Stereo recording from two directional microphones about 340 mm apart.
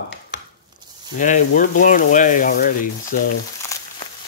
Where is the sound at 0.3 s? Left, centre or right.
Left.